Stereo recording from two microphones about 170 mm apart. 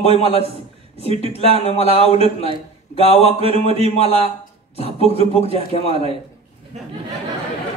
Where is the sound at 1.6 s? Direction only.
35° left (ahead or behind).